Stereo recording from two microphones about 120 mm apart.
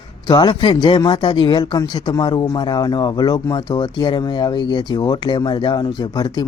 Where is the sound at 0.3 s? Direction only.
40° left (ahead or behind).